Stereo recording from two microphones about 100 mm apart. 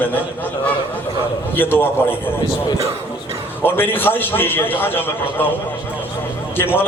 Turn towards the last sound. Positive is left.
turn(degrees=20)  # may be behind; listen again after turning